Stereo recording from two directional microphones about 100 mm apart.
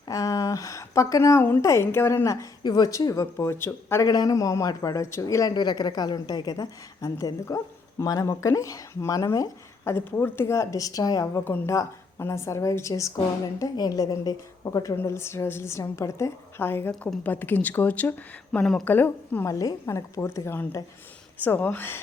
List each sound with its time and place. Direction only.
0.1 s a woman's voice: 35° left (ahead or behind)
3.3 s a woman's voice: 25° left (ahead or behind)
4.0 s a woman's voice: 40° left (ahead or behind)
10.1 s a woman's voice: 20° left (ahead or behind); by 11.3 s 40° left (ahead or behind)
11.3 s a woman's voice: 25° left (ahead or behind)
18.6 s a woman's voice: 5° left (ahead or behind)
18.9 s a woman's voice: 20° left (ahead or behind)
19.5 s a woman's voice: 35° left (ahead or behind)